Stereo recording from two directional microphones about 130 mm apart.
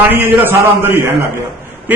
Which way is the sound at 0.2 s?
15° right (ahead or behind).